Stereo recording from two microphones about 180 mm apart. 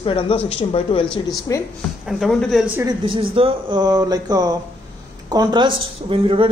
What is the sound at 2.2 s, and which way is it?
Speech, centre (ahead or behind).